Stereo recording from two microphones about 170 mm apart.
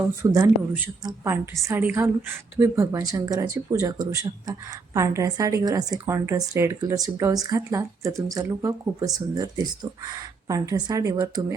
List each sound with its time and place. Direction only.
0.2 s speech: 20° right (ahead or behind)